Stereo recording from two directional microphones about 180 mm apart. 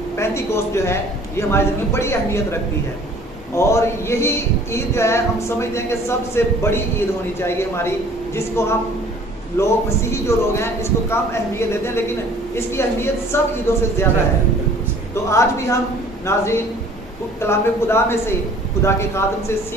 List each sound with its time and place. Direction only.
0.2 s speech: 15° left (ahead or behind)
15.2 s speech: 15° left (ahead or behind)